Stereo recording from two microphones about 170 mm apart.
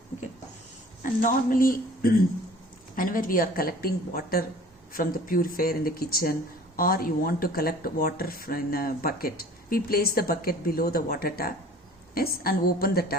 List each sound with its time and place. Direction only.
1.2 s speech: 55° left (ahead or behind)